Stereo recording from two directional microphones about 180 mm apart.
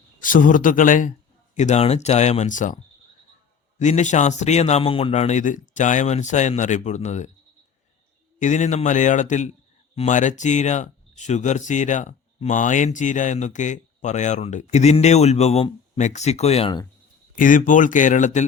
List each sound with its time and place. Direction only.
0.2 s speech: 45° left (ahead or behind)
3.8 s speech: 40° left (ahead or behind)
8.4 s speech: 40° left (ahead or behind)
17.3 s speech: 50° left (ahead or behind)